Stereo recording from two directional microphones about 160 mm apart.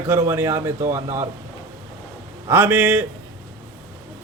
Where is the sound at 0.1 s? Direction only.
15° right (ahead or behind).